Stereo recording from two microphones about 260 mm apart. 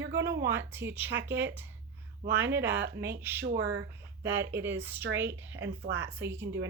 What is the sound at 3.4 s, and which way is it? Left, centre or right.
Speech, right.